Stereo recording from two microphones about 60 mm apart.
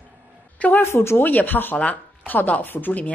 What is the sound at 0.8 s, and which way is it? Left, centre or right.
Speech, left.